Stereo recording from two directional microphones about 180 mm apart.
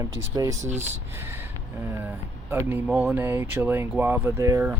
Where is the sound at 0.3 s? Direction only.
20° right (ahead or behind).